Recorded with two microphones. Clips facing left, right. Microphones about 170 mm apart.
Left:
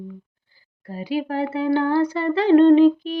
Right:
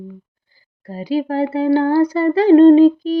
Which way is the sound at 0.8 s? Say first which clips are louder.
Right 5 dB; 40° right (ahead or behind).